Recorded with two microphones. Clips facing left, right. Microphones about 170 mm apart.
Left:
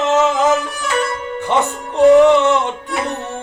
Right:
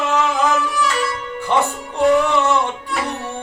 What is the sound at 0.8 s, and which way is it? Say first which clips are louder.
Music: left 1 dB; 50° left (ahead or behind).